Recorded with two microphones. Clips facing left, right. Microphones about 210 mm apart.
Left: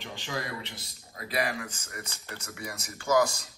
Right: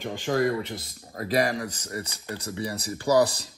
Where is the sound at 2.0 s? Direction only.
15° right (ahead or behind).